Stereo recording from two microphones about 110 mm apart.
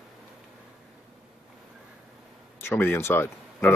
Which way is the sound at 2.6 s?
20° left (ahead or behind).